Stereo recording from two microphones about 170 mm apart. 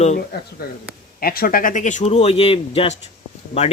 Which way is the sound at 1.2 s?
60° left (ahead or behind).